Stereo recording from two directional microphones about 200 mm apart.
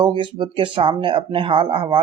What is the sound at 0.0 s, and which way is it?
Speech, 25° right (ahead or behind).